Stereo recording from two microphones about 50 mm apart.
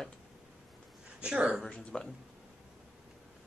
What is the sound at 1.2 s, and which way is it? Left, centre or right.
Speech, centre.